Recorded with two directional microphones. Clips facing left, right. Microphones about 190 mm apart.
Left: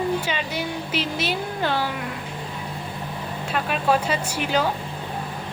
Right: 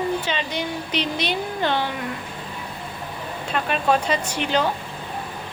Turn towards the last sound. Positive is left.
turn(degrees=10)  # may be behind; listen again after turning